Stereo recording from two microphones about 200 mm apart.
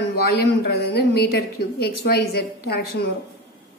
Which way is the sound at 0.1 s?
50° left (ahead or behind).